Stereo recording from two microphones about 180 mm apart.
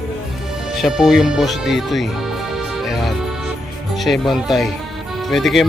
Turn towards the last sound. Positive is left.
turn(degrees=0)  # may be behind; listen again after turning